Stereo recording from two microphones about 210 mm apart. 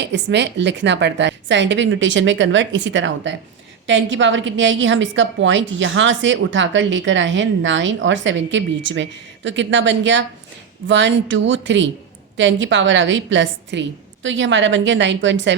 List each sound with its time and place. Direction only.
0.0 s a woman's voice: 55° right (ahead or behind)